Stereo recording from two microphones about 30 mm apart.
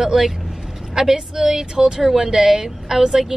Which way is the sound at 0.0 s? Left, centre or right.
Centre.